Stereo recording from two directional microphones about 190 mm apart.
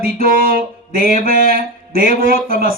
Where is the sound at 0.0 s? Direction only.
50° right (ahead or behind).